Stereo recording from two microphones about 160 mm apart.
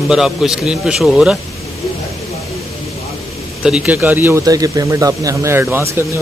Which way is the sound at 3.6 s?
5° right (ahead or behind).